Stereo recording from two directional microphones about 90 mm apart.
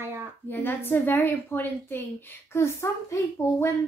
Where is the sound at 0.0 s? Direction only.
30° right (ahead or behind).